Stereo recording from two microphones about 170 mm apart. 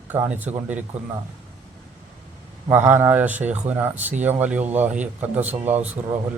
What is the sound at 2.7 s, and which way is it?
Speech, 10° right (ahead or behind).